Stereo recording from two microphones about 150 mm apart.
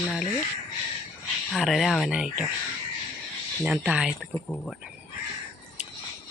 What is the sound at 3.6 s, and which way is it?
Speech, 5° right (ahead or behind).